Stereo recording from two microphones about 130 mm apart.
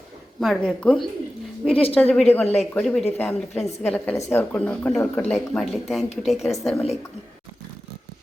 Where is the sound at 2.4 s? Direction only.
55° left (ahead or behind).